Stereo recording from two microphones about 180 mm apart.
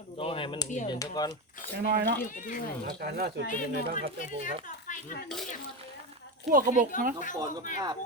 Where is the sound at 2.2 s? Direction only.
45° left (ahead or behind).